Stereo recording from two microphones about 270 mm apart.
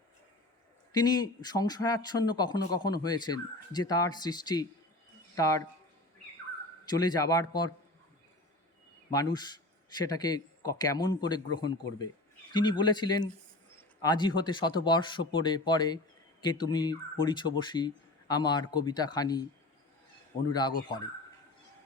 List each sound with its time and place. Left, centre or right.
0.9 s speech: centre
6.9 s speech: centre
9.0 s speech: centre
20.5 s speech: centre